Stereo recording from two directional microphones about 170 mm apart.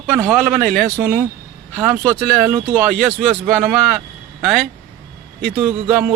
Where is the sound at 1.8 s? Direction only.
15° right (ahead or behind).